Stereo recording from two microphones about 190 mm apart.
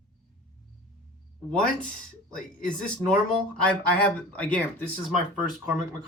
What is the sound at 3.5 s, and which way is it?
Speech, 5° left (ahead or behind).